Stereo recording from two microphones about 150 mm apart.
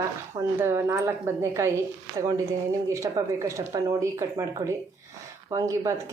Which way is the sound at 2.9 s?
20° right (ahead or behind).